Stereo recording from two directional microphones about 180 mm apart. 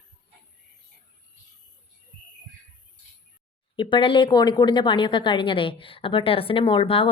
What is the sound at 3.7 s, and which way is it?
A woman's voice, 25° left (ahead or behind).